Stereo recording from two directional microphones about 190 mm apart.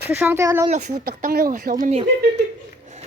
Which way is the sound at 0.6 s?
40° right (ahead or behind).